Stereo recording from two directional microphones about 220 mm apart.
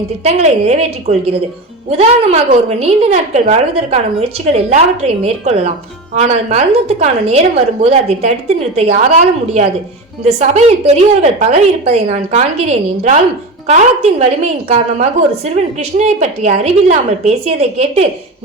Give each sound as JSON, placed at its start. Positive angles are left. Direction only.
{"t": 0.2, "sound": "a woman's voice", "side_deg": -30}